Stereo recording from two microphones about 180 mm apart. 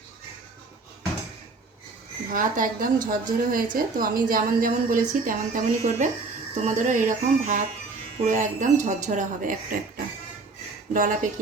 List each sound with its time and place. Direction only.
2.3 s a woman's voice: 50° right (ahead or behind)
10.9 s a woman's voice: 50° right (ahead or behind)